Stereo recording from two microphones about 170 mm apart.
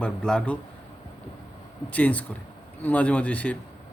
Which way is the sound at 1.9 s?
10° left (ahead or behind).